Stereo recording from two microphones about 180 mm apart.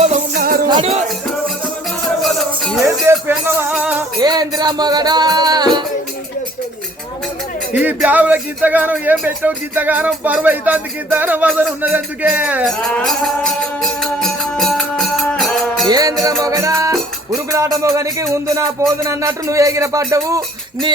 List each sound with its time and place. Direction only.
0.3 s music: 55° right (ahead or behind)
0.7 s music: 35° right (ahead or behind)
2.2 s music: centre (ahead or behind)
2.8 s speech: 15° right (ahead or behind)
4.2 s music: 20° right (ahead or behind)
7.7 s speech: 10° right (ahead or behind)
12.9 s music: centre (ahead or behind)
15.9 s music: 20° right (ahead or behind)
16.2 s speech: 20° right (ahead or behind)